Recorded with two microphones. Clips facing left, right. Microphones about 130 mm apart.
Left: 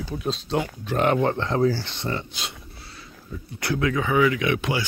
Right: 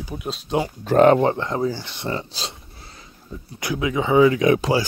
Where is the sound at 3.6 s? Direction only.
15° right (ahead or behind); by 4.9 s 35° right (ahead or behind).